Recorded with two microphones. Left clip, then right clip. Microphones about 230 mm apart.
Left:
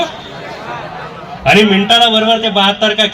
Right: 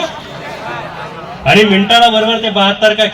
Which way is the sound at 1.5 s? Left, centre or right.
Left.